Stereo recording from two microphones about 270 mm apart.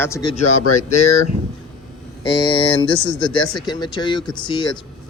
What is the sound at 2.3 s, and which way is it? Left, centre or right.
Speech, centre.